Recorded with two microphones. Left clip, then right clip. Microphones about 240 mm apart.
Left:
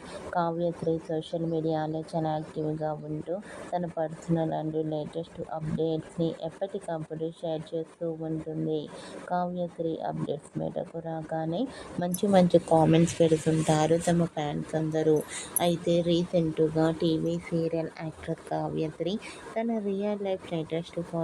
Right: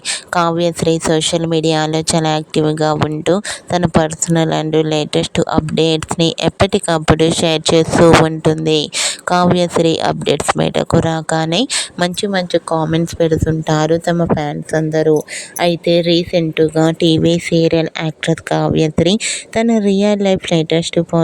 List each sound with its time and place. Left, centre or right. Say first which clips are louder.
0.3 s speech: right 14 dB; right